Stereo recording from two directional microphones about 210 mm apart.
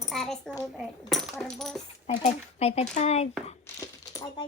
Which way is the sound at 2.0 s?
30° left (ahead or behind).